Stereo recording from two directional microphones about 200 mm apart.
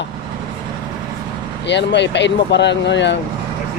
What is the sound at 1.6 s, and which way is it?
Speech, 60° left (ahead or behind).